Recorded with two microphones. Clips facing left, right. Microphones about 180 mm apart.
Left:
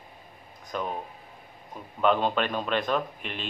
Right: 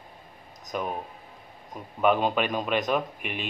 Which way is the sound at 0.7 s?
10° right (ahead or behind).